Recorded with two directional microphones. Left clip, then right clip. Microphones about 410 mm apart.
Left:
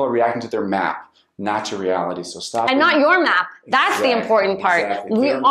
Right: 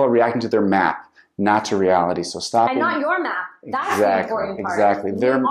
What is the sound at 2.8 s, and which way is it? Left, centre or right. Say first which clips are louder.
Speech: left 6 dB; centre.